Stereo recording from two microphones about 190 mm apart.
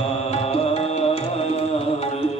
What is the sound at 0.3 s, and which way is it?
Music, 30° left (ahead or behind).